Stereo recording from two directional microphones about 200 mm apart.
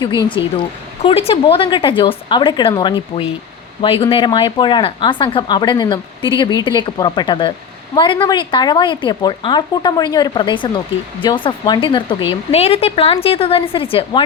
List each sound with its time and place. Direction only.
1.0 s speech: 30° left (ahead or behind)